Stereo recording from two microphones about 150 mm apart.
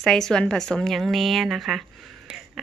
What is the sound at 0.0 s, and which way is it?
A woman's voice, 5° left (ahead or behind).